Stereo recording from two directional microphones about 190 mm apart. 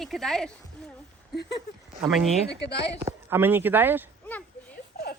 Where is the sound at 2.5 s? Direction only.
65° left (ahead or behind).